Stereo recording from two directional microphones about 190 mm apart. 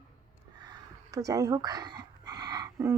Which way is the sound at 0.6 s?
20° right (ahead or behind).